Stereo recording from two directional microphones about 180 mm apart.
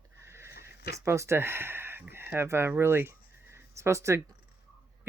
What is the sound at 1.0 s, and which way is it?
Speech, 15° right (ahead or behind).